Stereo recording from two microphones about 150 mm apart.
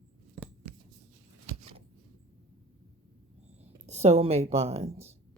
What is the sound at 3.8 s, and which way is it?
Speech, 45° right (ahead or behind).